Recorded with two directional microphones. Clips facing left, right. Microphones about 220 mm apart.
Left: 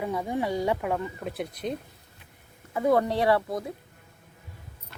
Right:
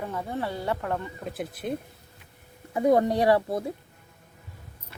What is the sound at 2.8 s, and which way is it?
Speech, 20° right (ahead or behind).